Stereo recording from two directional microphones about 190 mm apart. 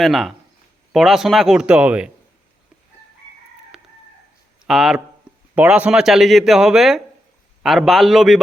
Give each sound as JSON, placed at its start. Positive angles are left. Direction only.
{"t": 0.0, "sound": "speech", "side_deg": 0}
{"t": 3.7, "sound": "chicken", "side_deg": 0}
{"t": 4.6, "sound": "speech", "side_deg": 0}